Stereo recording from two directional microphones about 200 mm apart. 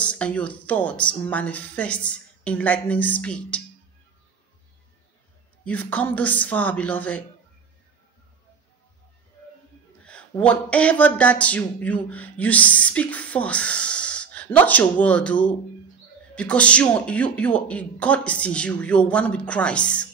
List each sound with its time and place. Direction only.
0.0 s speech: 5° left (ahead or behind)
5.7 s speech: 5° left (ahead or behind)
10.0 s speech: 5° left (ahead or behind)